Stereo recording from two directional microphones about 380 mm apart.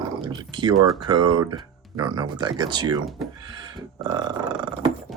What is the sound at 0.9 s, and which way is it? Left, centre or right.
Speech, centre.